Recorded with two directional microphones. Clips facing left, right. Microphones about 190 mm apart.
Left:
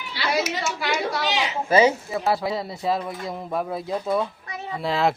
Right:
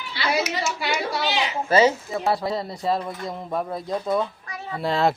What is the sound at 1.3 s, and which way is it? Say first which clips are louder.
Speech: even; 10° left (ahead or behind).